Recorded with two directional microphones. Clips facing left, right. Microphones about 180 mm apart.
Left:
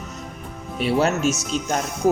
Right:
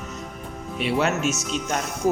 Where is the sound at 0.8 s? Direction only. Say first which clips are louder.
Left 3 dB; 35° left (ahead or behind).